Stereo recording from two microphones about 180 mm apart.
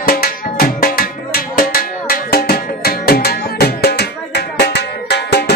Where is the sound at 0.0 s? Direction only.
55° left (ahead or behind).